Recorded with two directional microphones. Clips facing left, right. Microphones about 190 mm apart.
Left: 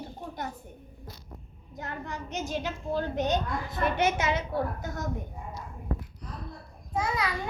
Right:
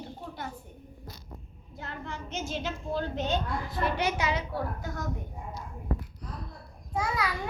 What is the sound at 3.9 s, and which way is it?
Speech, 50° left (ahead or behind).